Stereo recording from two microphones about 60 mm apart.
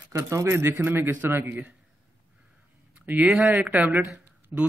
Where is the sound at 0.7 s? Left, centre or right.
Right.